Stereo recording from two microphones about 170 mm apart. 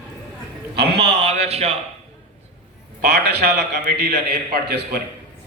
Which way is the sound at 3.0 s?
75° right (ahead or behind).